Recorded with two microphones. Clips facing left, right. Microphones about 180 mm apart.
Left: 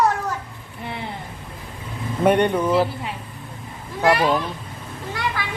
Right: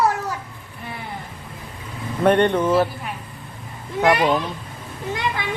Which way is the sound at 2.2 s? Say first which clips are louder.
Right 1 dB; 10° left (ahead or behind).